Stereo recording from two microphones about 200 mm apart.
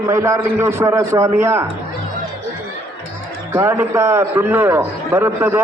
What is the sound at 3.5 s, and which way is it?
A man's voice, 10° right (ahead or behind).